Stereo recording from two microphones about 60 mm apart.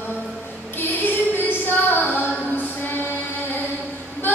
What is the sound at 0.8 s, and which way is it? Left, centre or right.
Female singing, left.